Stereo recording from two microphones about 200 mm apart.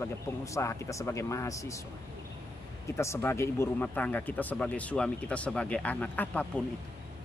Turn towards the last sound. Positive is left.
turn(degrees=5)  # may be behind; listen again after turning